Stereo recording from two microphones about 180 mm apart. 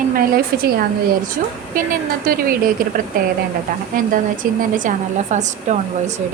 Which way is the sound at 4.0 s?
50° right (ahead or behind).